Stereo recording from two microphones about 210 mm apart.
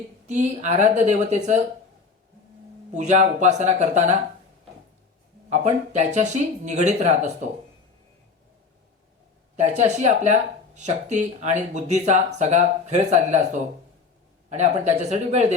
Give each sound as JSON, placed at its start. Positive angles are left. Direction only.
{"t": 0.3, "sound": "speech", "side_deg": -35}
{"t": 2.9, "sound": "speech", "side_deg": -35}
{"t": 5.5, "sound": "speech", "side_deg": -35}
{"t": 9.6, "sound": "speech", "side_deg": -35}